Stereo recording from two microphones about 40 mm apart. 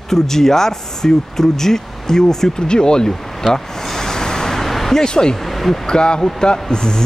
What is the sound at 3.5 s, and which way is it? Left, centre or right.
Vehicle, centre.